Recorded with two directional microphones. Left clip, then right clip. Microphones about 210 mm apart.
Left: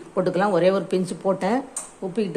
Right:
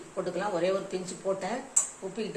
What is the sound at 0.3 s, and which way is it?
A woman's voice, 50° left (ahead or behind).